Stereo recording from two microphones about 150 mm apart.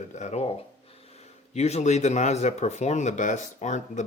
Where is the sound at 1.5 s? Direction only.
45° left (ahead or behind).